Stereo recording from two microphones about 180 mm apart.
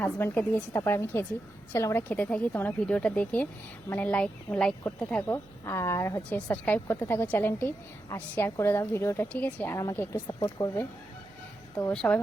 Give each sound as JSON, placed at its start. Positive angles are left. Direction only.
{"t": 0.0, "sound": "a woman's voice", "side_deg": 10}
{"t": 10.2, "sound": "speech", "side_deg": 30}
{"t": 11.8, "sound": "a woman's voice", "side_deg": 10}